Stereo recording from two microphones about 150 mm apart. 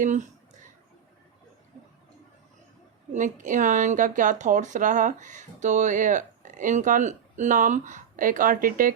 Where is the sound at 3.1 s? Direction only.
55° right (ahead or behind).